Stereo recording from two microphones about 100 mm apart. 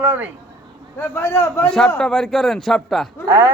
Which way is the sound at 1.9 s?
5° left (ahead or behind).